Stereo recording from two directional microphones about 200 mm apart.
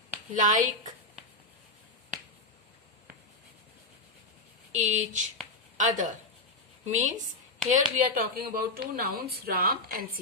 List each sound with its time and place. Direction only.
0.3 s a woman's voice: 40° right (ahead or behind)
4.7 s a woman's voice: 40° right (ahead or behind)